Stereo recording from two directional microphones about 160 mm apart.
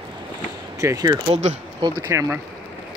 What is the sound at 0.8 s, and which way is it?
Speech, 20° right (ahead or behind).